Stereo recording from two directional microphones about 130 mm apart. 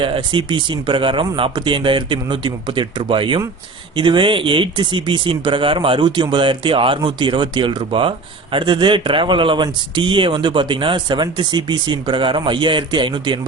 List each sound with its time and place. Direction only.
0.0 s speech: 40° right (ahead or behind)